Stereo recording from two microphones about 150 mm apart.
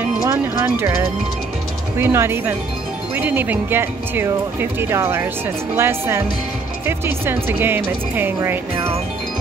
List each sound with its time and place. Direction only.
0.2 s speech: 20° right (ahead or behind)